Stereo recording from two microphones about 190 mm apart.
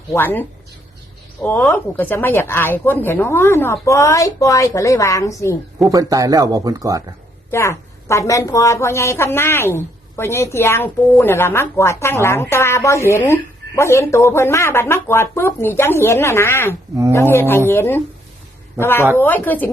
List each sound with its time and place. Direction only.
0.1 s a woman's voice: 10° left (ahead or behind)
5.8 s speech: 20° right (ahead or behind)
7.5 s a woman's voice: 15° left (ahead or behind)